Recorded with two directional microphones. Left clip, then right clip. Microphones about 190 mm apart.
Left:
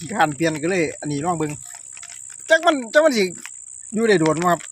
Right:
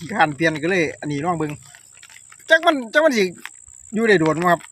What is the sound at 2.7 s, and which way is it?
Speech, 10° left (ahead or behind).